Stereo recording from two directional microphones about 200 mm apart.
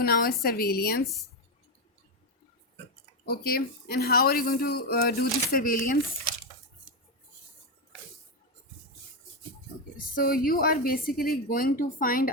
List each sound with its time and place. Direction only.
0.0 s a man's voice: 50° left (ahead or behind)
3.2 s a man's voice: 50° left (ahead or behind)
10.0 s a man's voice: 45° left (ahead or behind)